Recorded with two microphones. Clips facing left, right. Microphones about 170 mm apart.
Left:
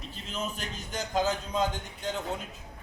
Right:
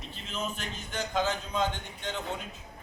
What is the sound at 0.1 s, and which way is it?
A man's voice, 40° left (ahead or behind).